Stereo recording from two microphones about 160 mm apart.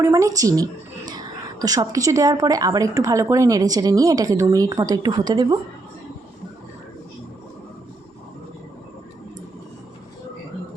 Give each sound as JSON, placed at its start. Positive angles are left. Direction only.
{"t": 0.0, "sound": "a woman's voice", "side_deg": -20}